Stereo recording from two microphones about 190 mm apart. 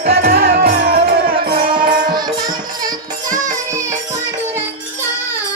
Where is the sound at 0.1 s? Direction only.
60° right (ahead or behind).